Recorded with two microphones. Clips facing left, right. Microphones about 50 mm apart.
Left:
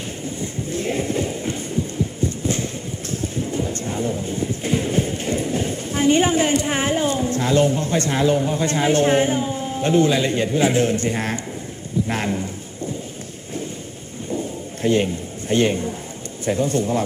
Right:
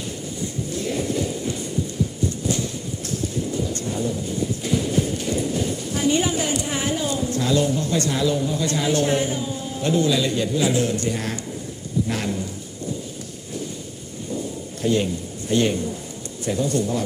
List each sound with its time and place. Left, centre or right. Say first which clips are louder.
0.3 s a sound: left 1 dB; left
12.0 s speech: left 2 dB; left
14.8 s a man's voice: left 2 dB; left